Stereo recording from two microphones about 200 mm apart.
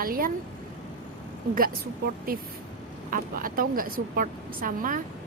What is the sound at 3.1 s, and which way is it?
A woman's voice, 45° right (ahead or behind).